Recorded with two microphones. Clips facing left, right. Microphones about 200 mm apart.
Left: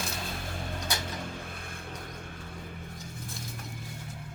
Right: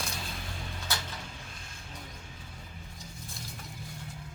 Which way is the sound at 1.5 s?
60° left (ahead or behind).